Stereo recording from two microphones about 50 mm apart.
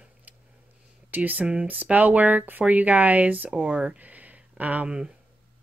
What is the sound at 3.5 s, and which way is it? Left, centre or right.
Speech, centre.